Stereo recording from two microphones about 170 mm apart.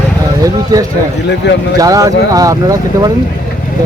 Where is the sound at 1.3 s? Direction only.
90° left.